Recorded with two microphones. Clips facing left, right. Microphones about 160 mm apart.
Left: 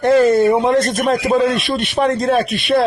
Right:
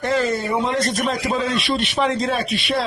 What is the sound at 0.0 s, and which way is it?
Speech, 55° left (ahead or behind).